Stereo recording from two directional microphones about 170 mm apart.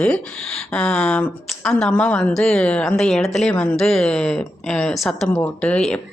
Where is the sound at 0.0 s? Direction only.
5° left (ahead or behind).